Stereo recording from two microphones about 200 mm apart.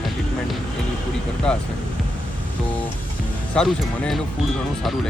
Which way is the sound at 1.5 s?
5° left (ahead or behind).